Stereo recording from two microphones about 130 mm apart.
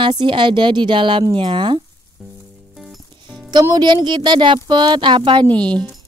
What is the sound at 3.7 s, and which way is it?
Speech, 35° right (ahead or behind).